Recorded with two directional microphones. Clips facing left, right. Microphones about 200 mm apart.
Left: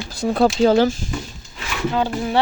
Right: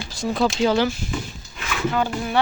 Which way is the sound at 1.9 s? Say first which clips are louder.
Left 3 dB; 25° left (ahead or behind).